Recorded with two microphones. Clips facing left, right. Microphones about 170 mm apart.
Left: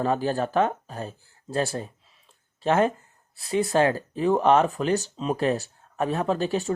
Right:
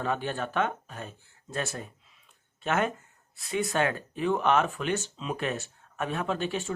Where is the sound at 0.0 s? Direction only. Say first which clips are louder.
Left 6 dB; 35° left (ahead or behind).